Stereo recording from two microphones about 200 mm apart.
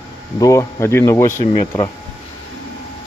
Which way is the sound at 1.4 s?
25° left (ahead or behind).